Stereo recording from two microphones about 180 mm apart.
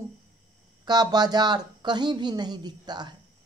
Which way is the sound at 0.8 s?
25° right (ahead or behind).